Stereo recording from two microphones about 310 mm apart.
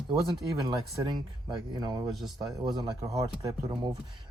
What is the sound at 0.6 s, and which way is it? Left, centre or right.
Speech, centre.